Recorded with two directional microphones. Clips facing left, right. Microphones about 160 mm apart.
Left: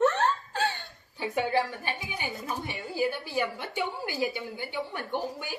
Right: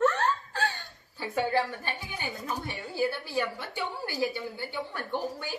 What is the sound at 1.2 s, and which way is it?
A woman's voice, 15° left (ahead or behind).